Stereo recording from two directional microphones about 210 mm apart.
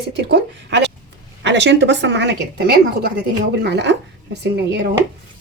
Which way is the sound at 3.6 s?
55° right (ahead or behind).